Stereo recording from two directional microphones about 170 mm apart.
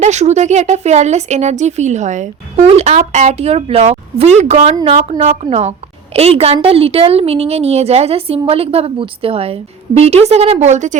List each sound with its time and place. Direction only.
0.0 s speech: 40° right (ahead or behind)